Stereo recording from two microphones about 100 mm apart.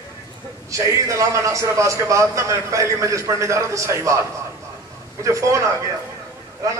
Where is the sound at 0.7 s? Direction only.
30° right (ahead or behind).